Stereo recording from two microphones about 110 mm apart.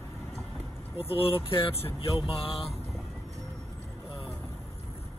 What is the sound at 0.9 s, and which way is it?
Speech, 60° left (ahead or behind).